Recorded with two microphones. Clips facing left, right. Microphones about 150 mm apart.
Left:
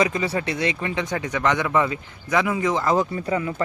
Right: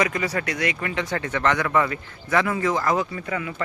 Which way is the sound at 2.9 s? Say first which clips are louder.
Left 4 dB; 30° left (ahead or behind).